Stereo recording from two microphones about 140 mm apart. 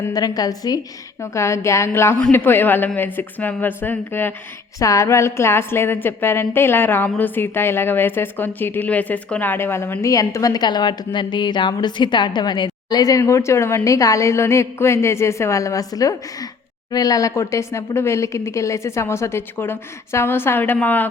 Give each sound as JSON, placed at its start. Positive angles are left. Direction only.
{"t": 0.1, "sound": "a woman's voice", "side_deg": 30}